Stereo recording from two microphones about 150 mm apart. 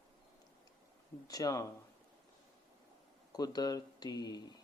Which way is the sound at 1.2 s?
25° left (ahead or behind).